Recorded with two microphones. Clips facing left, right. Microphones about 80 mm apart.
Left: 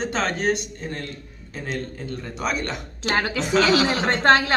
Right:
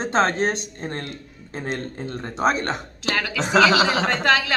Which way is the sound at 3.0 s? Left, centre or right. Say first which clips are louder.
Left 4 dB; left.